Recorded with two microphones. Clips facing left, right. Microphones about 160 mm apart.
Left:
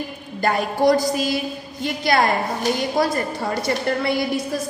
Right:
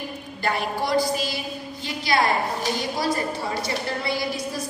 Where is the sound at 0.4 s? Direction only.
45° left (ahead or behind).